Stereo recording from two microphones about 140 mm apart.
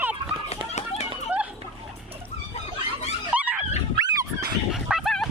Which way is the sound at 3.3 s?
10° right (ahead or behind).